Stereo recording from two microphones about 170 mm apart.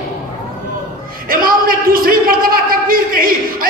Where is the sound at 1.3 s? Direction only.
55° right (ahead or behind).